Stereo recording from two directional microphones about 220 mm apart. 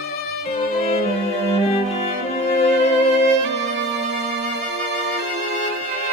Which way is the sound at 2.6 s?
30° left (ahead or behind).